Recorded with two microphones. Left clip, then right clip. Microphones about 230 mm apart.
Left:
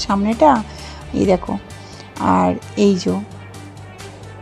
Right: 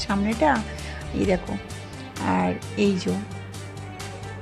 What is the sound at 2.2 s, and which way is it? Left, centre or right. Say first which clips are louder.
Speech: left 9 dB; centre.